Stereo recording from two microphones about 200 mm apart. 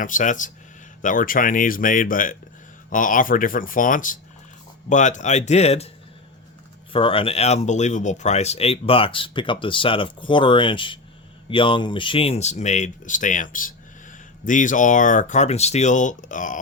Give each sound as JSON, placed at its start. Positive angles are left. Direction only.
{"t": 0.0, "sound": "speech", "side_deg": 40}
{"t": 6.9, "sound": "speech", "side_deg": 25}